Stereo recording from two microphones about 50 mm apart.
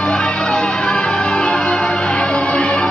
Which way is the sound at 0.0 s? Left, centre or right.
Centre.